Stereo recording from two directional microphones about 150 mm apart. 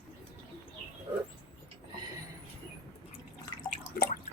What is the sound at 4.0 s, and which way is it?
Drip, 80° left.